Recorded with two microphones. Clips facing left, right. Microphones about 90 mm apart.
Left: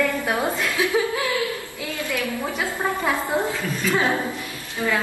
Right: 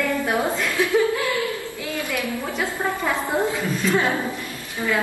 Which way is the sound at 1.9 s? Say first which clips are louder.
Even; 20° right (ahead or behind).